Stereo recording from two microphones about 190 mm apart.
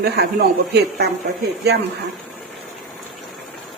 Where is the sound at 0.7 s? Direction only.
60° right (ahead or behind).